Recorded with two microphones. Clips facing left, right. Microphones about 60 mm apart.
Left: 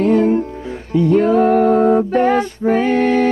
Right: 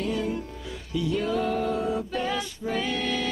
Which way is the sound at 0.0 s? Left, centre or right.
Left.